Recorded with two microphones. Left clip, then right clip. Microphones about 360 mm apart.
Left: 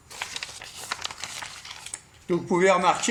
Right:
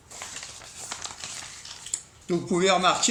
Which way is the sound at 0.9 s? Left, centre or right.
Left.